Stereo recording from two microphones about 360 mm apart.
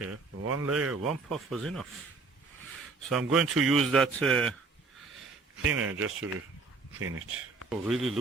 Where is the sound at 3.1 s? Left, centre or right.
Centre.